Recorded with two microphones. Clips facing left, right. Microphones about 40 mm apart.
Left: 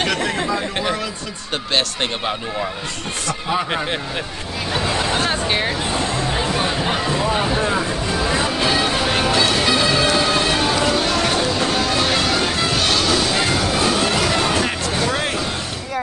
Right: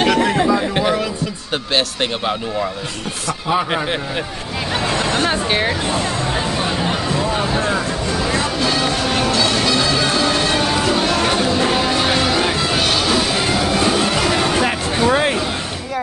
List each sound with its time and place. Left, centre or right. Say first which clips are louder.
0.0 s chatter: right 6 dB; centre
1.5 s speech: right 1 dB; centre
6.3 s music: even; centre
15.0 s a sound: right 10 dB; right